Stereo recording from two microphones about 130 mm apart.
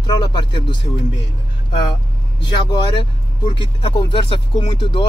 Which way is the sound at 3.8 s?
40° left (ahead or behind).